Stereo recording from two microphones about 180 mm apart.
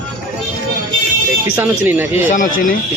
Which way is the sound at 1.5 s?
10° right (ahead or behind).